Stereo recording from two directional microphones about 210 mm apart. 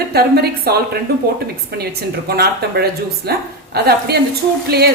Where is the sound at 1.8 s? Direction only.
50° right (ahead or behind).